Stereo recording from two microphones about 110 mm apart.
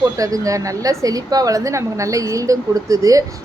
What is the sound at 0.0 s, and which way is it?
A woman's voice, 30° right (ahead or behind).